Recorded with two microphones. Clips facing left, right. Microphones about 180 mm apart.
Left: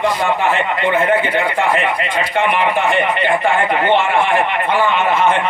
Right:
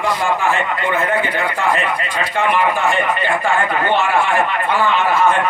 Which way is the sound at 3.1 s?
20° left (ahead or behind).